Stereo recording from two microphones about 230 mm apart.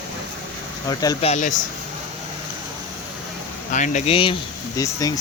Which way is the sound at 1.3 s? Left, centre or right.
Left.